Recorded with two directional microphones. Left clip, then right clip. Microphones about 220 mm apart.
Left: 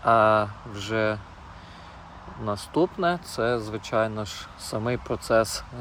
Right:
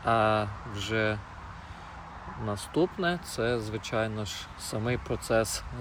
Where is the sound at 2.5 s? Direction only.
20° left (ahead or behind).